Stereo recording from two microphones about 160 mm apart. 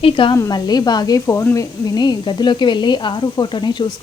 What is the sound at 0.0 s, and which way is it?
Speech, 30° left (ahead or behind).